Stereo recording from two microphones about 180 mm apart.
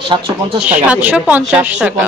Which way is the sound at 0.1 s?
30° right (ahead or behind).